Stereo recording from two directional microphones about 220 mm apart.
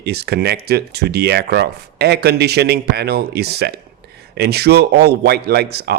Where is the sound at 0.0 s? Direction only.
45° right (ahead or behind).